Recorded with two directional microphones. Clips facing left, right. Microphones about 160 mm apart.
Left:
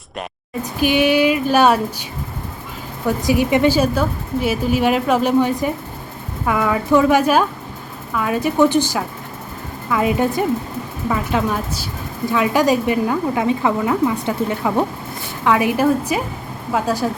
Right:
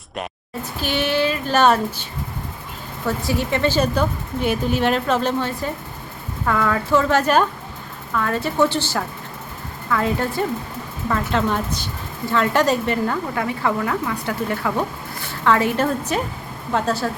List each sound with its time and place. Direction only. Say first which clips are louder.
0.6 s a woman's voice: left 7 dB; 15° left (ahead or behind)
3.1 s a woman's voice: left 6 dB; 15° left (ahead or behind)